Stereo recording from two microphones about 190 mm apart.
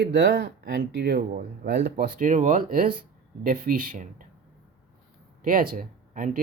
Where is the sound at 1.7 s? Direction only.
60° right (ahead or behind); by 4.2 s 45° right (ahead or behind).